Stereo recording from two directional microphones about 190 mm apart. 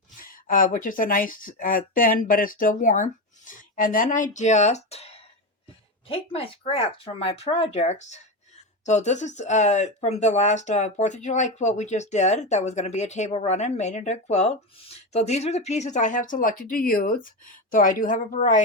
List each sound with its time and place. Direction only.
0.2 s speech: 45° left (ahead or behind)